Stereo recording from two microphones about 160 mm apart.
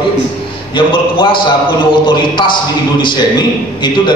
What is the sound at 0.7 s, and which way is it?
A man's voice, 30° left (ahead or behind).